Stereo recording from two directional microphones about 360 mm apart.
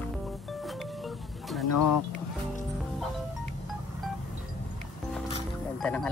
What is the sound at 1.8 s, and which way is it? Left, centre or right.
Speech, left.